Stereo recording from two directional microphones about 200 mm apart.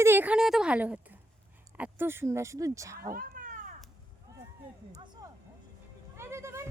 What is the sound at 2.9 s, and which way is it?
Cat, 45° right (ahead or behind).